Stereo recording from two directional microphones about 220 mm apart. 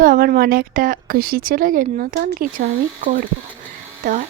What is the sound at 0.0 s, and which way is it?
Speech, 40° right (ahead or behind).